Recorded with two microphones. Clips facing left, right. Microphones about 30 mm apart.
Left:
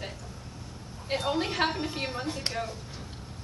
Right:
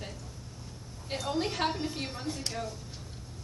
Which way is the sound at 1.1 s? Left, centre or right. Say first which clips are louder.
Left 3 dB; left.